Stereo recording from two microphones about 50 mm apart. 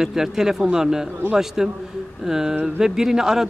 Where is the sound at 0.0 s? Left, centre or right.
Centre.